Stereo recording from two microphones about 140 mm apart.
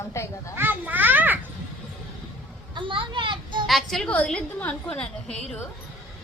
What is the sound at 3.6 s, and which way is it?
A woman's voice, centre (ahead or behind).